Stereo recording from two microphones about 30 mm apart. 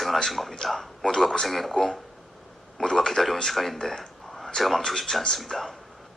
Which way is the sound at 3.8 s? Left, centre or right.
Centre.